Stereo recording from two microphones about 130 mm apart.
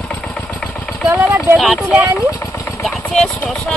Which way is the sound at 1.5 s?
Centre (ahead or behind).